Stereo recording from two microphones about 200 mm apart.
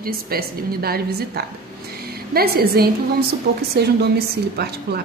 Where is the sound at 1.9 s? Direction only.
50° right (ahead or behind).